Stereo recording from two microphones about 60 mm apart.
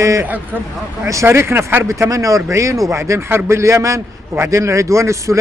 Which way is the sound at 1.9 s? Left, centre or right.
Right.